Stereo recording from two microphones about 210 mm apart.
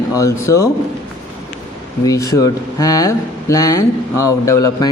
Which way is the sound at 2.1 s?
15° left (ahead or behind).